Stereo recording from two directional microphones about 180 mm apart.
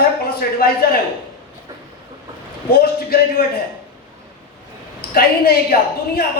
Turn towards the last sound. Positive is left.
turn(degrees=55)  # may be behind; listen again after turning